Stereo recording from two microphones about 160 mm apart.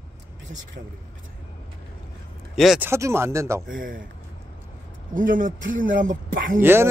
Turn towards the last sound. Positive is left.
turn(degrees=-15)  # may be behind; listen again after turning